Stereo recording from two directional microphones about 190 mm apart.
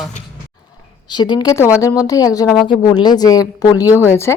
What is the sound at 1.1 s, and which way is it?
A woman's voice, 20° left (ahead or behind).